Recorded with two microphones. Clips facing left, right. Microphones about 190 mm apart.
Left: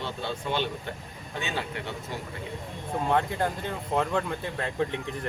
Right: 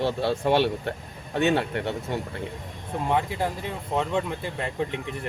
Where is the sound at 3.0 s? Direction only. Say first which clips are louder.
Right 1 dB; 5° right (ahead or behind).